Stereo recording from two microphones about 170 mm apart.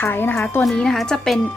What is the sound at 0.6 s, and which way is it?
Speech, 5° left (ahead or behind).